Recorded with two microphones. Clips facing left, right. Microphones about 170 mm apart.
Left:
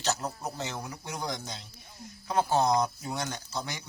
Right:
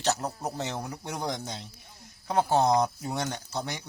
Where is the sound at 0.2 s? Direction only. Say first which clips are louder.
Right 3 dB; 35° right (ahead or behind).